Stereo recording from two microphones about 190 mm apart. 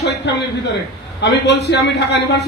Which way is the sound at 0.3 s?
65° left (ahead or behind).